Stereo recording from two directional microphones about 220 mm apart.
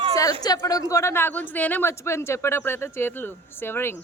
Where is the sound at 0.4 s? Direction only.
15° left (ahead or behind).